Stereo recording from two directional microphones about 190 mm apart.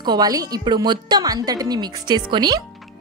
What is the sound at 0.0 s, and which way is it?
A woman's voice, 20° right (ahead or behind).